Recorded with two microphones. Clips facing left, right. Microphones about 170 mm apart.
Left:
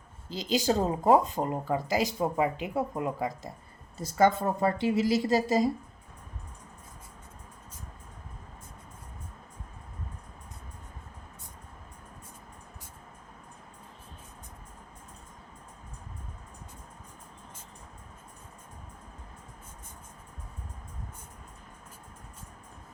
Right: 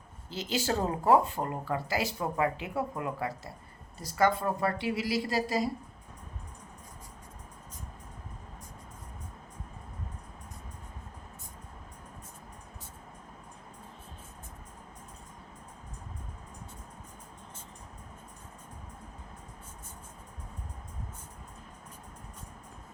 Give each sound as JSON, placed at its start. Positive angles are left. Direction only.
{"t": 0.4, "sound": "speech", "side_deg": 15}